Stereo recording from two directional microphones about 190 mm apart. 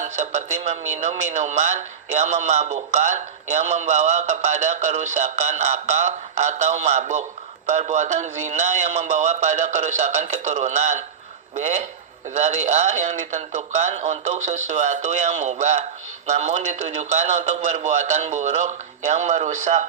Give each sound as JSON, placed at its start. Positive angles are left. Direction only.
{"t": 0.0, "sound": "speech", "side_deg": -40}